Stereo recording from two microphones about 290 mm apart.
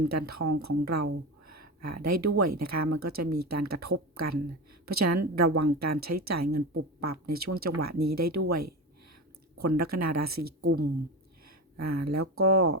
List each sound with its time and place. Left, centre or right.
0.1 s a woman's voice: right
1.5 s a sound: right
2.4 s a woman's voice: right
11.4 s a woman's voice: right